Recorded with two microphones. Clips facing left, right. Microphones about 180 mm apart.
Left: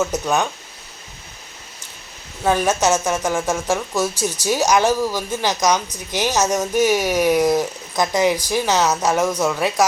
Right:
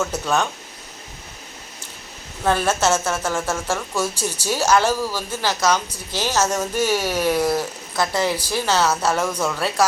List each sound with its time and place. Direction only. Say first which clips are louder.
2.4 s a woman's voice: left 2 dB; 10° left (ahead or behind)
4.1 s speech: left 3 dB; 10° right (ahead or behind)
4.4 s a woman's voice: left 2 dB; 15° left (ahead or behind)